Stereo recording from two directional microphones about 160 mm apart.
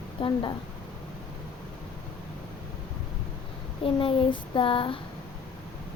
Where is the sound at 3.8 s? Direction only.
35° left (ahead or behind).